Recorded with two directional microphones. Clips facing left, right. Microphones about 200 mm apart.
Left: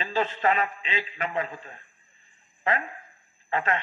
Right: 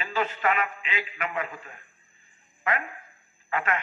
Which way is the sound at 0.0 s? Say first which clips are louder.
Left 2 dB; 30° left (ahead or behind).